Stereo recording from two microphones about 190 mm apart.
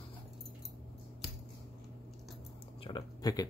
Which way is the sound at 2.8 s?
20° left (ahead or behind).